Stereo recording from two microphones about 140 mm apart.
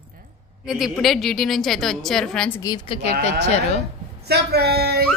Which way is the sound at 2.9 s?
45° left (ahead or behind).